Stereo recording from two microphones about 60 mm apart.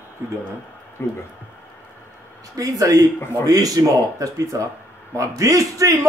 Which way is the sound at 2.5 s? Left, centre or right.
Right.